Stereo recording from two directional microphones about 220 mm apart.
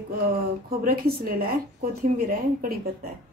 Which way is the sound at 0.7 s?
40° right (ahead or behind).